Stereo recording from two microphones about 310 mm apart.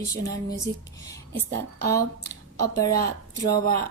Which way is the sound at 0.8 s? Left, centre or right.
Centre.